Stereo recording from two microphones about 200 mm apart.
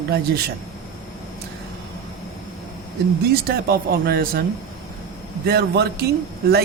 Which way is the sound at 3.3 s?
50° right (ahead or behind).